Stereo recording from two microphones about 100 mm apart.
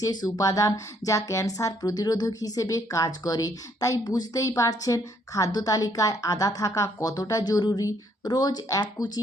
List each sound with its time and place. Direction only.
0.0 s speech: 40° left (ahead or behind)